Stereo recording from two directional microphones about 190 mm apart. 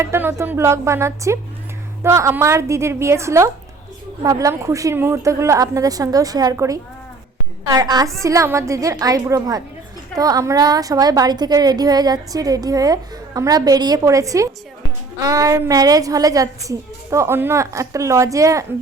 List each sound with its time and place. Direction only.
0.0 s a woman's voice: 15° right (ahead or behind)